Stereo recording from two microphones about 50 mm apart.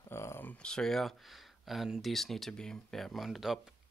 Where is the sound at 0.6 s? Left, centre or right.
Centre.